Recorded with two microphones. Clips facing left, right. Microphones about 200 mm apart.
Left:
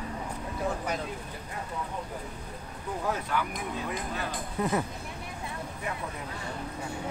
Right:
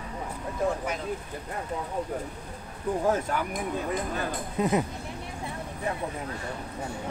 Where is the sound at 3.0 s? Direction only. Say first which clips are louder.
Right 3 dB; 45° right (ahead or behind).